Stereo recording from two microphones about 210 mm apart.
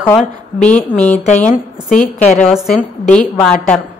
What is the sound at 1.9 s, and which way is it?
Speech, 35° left (ahead or behind).